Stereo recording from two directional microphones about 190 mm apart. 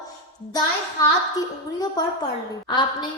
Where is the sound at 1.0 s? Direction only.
20° left (ahead or behind).